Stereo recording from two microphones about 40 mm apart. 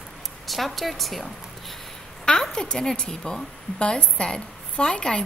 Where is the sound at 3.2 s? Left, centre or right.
Left.